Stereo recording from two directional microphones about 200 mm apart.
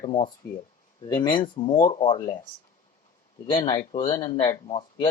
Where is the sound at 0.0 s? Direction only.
25° left (ahead or behind).